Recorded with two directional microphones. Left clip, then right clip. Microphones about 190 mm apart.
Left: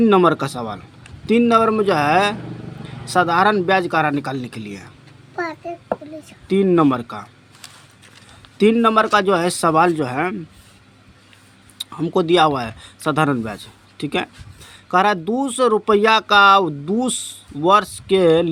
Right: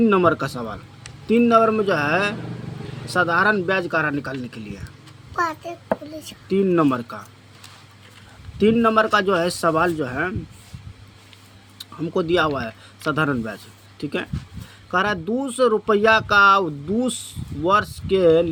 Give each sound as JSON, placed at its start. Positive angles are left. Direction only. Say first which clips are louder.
{"t": 0.0, "sound": "speech", "louder": "left 3 dB", "side_deg": 35}
{"t": 6.5, "sound": "speech", "louder": "left 3 dB", "side_deg": 30}
{"t": 8.5, "sound": "speech", "louder": "left 2 dB", "side_deg": 35}
{"t": 11.8, "sound": "speech", "louder": "left 4 dB", "side_deg": 35}